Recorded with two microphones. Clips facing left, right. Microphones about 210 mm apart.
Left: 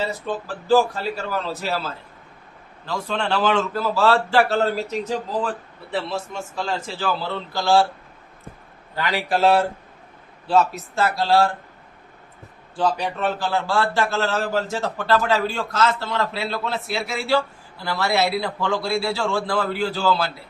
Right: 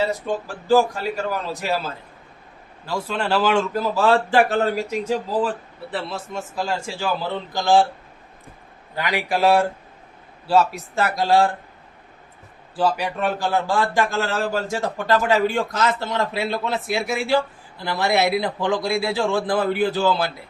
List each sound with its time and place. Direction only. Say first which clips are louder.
0.0 s a man's voice: right 3 dB; 15° right (ahead or behind)
5.9 s a man's voice: left 2 dB; centre (ahead or behind)
6.7 s a man's voice: left 1 dB; 10° right (ahead or behind)
9.0 s a man's voice: even; 15° right (ahead or behind)
12.7 s a man's voice: right 1 dB; 5° right (ahead or behind)